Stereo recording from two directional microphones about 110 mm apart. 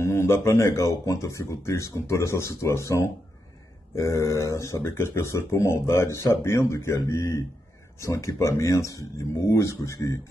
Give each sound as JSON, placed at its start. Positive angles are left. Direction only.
{"t": 0.0, "sound": "speech", "side_deg": 25}